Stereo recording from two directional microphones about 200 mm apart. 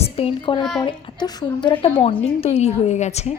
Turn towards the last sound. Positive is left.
turn(degrees=35)  # may be behind; listen again after turning